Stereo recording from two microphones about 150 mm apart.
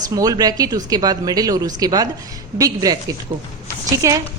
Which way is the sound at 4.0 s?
20° right (ahead or behind).